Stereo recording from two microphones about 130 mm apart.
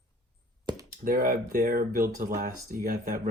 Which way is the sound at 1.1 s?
90° right.